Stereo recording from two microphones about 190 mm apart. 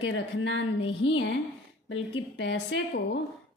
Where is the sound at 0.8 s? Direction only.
30° left (ahead or behind).